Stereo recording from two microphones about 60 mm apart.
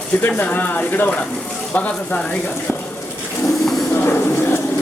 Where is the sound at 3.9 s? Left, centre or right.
Left.